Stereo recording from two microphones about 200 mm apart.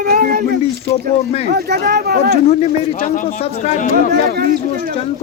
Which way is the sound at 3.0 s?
40° left (ahead or behind).